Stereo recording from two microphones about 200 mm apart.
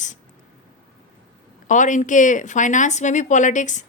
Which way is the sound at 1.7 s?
40° left (ahead or behind).